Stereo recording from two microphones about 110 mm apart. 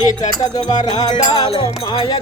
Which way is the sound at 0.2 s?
40° left (ahead or behind).